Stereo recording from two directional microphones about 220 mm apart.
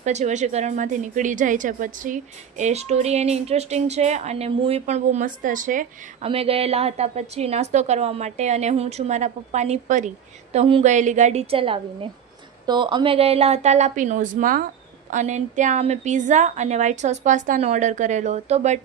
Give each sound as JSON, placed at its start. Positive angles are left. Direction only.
{"t": 0.0, "sound": "a woman's voice", "side_deg": -30}
{"t": 6.2, "sound": "a woman's voice", "side_deg": -25}